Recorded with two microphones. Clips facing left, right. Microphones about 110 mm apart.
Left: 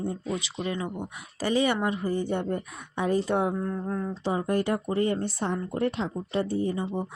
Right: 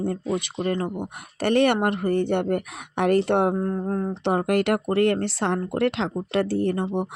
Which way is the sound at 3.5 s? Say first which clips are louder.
Right 5 dB; 35° right (ahead or behind).